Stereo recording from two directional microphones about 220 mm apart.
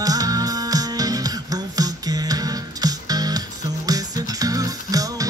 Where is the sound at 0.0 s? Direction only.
15° right (ahead or behind).